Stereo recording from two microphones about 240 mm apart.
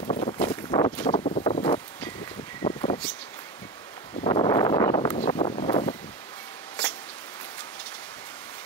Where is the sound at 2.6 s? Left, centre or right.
Centre.